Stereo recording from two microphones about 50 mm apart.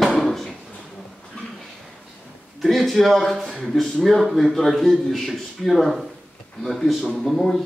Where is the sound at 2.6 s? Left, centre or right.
Centre.